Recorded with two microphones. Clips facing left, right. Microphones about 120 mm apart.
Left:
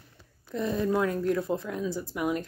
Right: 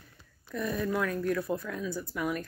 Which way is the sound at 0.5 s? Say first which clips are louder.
Left 4 dB; 25° left (ahead or behind).